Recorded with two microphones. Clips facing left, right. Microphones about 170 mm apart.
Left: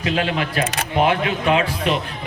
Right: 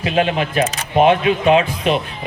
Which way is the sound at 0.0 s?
20° right (ahead or behind).